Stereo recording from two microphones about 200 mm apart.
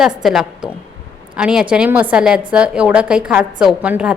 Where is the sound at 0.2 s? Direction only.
Centre (ahead or behind).